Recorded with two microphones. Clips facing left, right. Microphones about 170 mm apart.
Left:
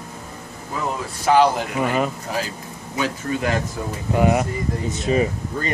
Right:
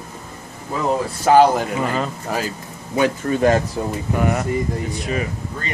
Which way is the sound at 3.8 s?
30° right (ahead or behind).